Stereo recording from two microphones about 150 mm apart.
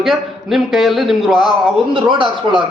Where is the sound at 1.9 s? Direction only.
30° right (ahead or behind).